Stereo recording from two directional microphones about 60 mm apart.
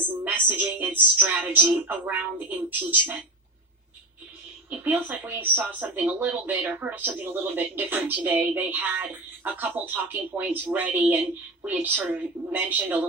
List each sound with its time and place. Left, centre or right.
0.3 s speech: right
4.7 s speech: right